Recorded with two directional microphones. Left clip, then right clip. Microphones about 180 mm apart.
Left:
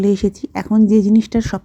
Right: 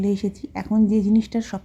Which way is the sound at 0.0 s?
30° left (ahead or behind).